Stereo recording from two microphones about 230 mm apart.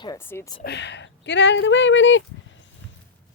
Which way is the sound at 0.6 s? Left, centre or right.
Left.